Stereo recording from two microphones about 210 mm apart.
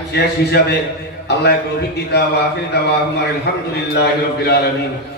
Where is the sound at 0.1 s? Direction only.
50° left (ahead or behind).